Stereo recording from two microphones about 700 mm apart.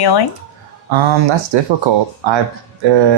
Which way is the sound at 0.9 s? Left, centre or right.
Right.